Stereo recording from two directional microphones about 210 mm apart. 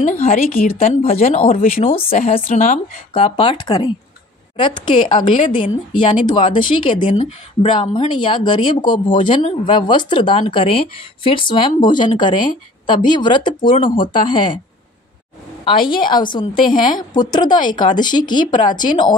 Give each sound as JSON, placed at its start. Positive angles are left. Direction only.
{"t": 0.2, "sound": "speech", "side_deg": 40}
{"t": 1.9, "sound": "speech", "side_deg": 25}
{"t": 15.6, "sound": "speech", "side_deg": 20}